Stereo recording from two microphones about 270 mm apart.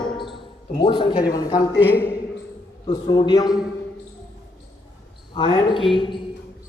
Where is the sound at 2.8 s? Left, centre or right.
Centre.